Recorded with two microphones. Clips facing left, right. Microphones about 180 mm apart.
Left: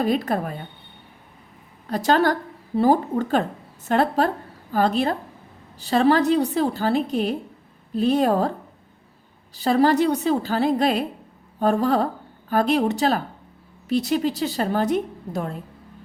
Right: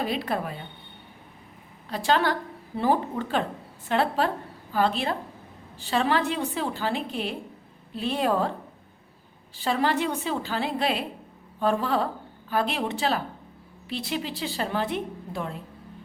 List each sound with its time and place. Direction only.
0.0 s a woman's voice: 45° left (ahead or behind)
1.9 s a woman's voice: 45° left (ahead or behind)
9.6 s a woman's voice: 40° left (ahead or behind)